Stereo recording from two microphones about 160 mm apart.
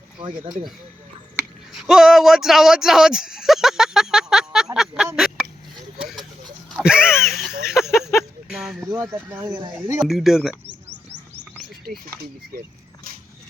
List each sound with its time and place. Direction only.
0.2 s speech: 25° right (ahead or behind)
1.7 s speech: centre (ahead or behind)
5.1 s a sound: 5° right (ahead or behind)
6.7 s a sound: 5° right (ahead or behind)
8.4 s speech: 5° right (ahead or behind)
8.9 s speech: 15° right (ahead or behind)
9.7 s speech: 10° right (ahead or behind)